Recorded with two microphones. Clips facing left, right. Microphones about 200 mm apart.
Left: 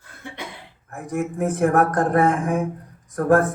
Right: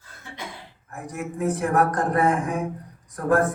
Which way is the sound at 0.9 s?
50° left (ahead or behind).